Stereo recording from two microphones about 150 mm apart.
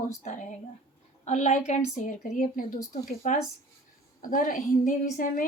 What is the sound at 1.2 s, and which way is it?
A woman's voice, 50° left (ahead or behind).